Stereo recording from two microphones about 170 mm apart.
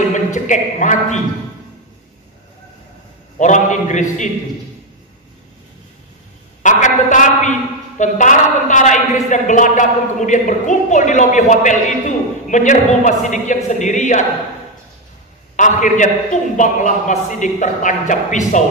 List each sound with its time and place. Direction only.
0.1 s a man's voice: 45° left (ahead or behind)
3.3 s a woman's voice: 45° left (ahead or behind)
6.6 s a woman's voice: 50° left (ahead or behind)
15.5 s a woman's voice: 50° left (ahead or behind)